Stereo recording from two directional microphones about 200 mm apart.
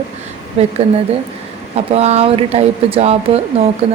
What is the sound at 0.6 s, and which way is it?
Speech, 30° right (ahead or behind).